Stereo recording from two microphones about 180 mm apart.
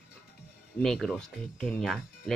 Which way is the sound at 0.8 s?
Centre (ahead or behind).